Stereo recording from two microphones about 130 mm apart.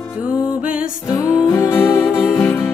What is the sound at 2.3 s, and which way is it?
Music, 5° left (ahead or behind).